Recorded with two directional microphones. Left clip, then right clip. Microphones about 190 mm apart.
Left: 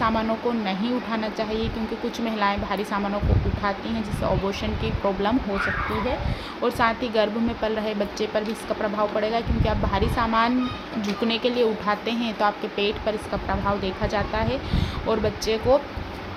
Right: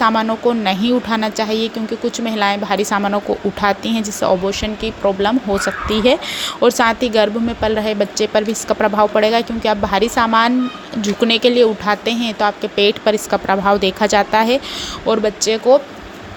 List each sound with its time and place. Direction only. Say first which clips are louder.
0.0 s speech: right 9 dB; 30° right (ahead or behind)
6.6 s speech: right 9 dB; 40° right (ahead or behind)
15.0 s speech: right 8 dB; 25° right (ahead or behind)